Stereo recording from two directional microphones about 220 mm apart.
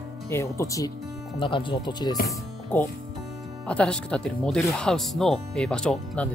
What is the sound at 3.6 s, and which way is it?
Speech, 5° left (ahead or behind).